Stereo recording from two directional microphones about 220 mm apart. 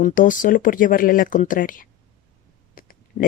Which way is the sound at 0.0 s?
40° left (ahead or behind).